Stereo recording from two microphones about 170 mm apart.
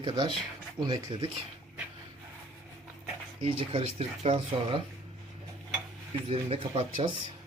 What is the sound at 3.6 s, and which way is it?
Speech, 30° right (ahead or behind).